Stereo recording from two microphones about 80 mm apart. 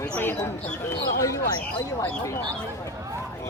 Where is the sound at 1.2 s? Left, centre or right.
Left.